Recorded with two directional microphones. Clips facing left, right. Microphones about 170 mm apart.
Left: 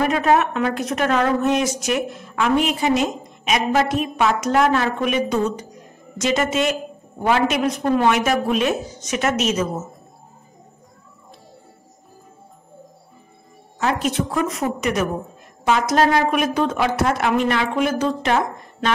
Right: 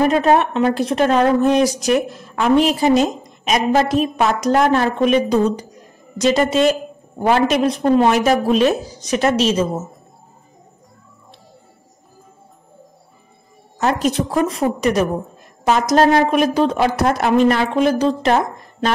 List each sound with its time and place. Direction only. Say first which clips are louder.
0.0 s a woman's voice: right 3 dB; 30° right (ahead or behind)
13.7 s a woman's voice: right 3 dB; 40° right (ahead or behind)